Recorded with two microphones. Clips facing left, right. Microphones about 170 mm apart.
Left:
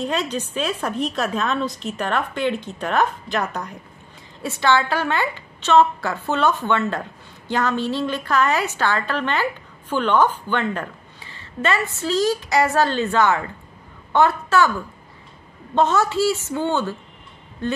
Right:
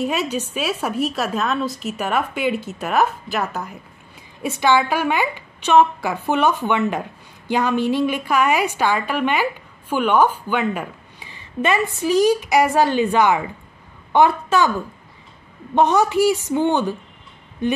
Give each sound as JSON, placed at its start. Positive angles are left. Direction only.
{"t": 0.0, "sound": "a woman's voice", "side_deg": -10}
{"t": 14.1, "sound": "a sound", "side_deg": -15}
{"t": 15.7, "sound": "a woman's voice", "side_deg": -15}